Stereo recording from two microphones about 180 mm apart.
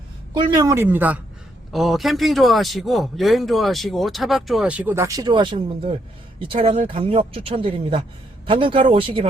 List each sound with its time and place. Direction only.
0.3 s speech: 20° right (ahead or behind)